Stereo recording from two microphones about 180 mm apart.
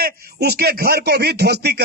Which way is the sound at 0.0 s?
60° right (ahead or behind).